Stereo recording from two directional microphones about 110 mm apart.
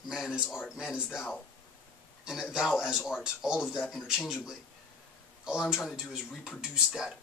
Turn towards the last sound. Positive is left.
turn(degrees=-5)  # may be behind; listen again after turning